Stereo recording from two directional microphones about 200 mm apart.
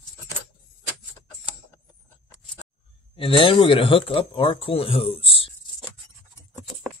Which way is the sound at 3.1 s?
25° left (ahead or behind).